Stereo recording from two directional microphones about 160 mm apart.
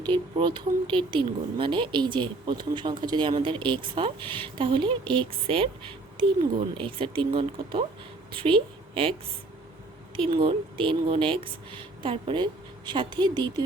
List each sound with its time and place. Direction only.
0.1 s a woman's voice: 30° right (ahead or behind)
10.2 s a woman's voice: 35° right (ahead or behind)